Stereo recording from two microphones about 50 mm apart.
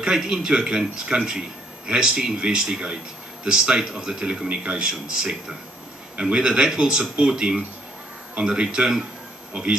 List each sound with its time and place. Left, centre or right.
0.0 s speech: centre